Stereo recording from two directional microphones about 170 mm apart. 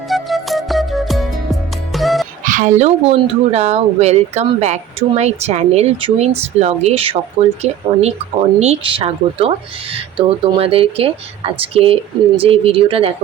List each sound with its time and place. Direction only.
0.1 s music: centre (ahead or behind)
2.4 s speech: 50° right (ahead or behind); by 13.1 s 35° right (ahead or behind)